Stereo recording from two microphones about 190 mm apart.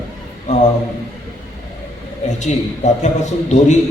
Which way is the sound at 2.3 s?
40° left (ahead or behind).